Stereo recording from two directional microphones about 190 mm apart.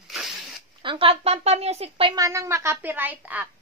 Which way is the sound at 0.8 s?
25° right (ahead or behind).